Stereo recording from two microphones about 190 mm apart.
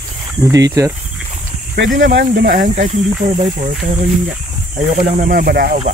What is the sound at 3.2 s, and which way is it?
Speech, 35° right (ahead or behind).